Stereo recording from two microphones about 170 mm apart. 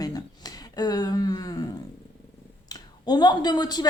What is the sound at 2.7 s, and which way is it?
Speech, 25° left (ahead or behind).